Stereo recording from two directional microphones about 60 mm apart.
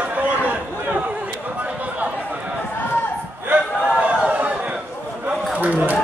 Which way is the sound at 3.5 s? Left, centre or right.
Centre.